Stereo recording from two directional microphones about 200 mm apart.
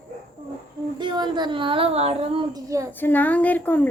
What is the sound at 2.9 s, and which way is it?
A woman's voice, 10° left (ahead or behind).